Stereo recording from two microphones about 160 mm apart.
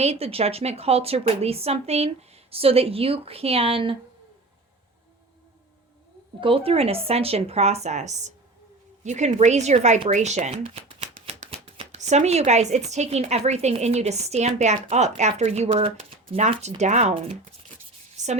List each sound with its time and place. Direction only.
0.0 s a woman's voice: 40° right (ahead or behind)
6.4 s a woman's voice: 35° right (ahead or behind)
10.5 s shuffling cards: 35° right (ahead or behind)
11.3 s speech: 40° right (ahead or behind)
18.2 s a sound: 50° right (ahead or behind)